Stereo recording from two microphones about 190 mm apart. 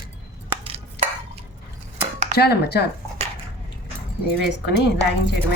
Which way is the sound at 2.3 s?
60° left (ahead or behind).